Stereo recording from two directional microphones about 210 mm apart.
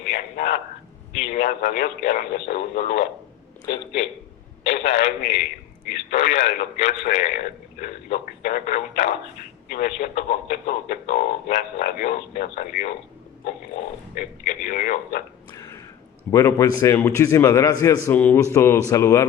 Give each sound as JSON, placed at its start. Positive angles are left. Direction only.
{"t": 1.2, "sound": "a man's voice", "side_deg": 35}
{"t": 4.6, "sound": "a man's voice", "side_deg": 35}
{"t": 14.2, "sound": "a man's voice", "side_deg": 40}
{"t": 15.5, "sound": "a sound", "side_deg": 15}
{"t": 16.3, "sound": "a man's voice", "side_deg": 15}